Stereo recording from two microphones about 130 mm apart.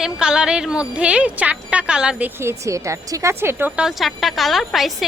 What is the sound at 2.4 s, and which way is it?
A woman's voice, 25° right (ahead or behind).